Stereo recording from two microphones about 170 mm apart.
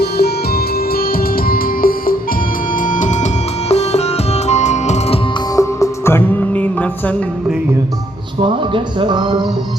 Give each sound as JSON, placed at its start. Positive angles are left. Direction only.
{"t": 0.0, "sound": "music", "side_deg": 70}
{"t": 5.5, "sound": "music", "side_deg": 15}
{"t": 8.4, "sound": "speech", "side_deg": -30}